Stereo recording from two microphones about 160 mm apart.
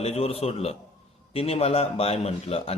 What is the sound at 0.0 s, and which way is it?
A man's voice, 40° left (ahead or behind).